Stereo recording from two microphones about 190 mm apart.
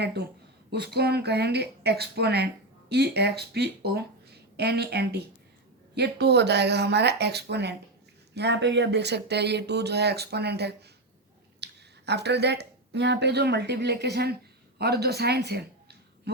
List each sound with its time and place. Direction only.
0.0 s speech: 60° right (ahead or behind)